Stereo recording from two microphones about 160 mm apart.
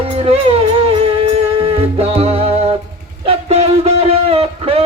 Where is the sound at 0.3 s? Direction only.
40° right (ahead or behind).